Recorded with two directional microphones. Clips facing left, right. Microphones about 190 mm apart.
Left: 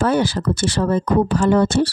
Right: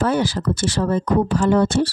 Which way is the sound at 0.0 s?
65° left (ahead or behind).